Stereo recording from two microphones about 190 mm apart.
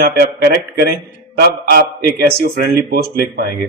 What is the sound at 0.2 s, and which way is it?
A man's voice, 55° right (ahead or behind).